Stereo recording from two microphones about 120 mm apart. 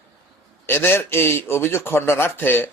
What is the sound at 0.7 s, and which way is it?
Speech, 20° left (ahead or behind).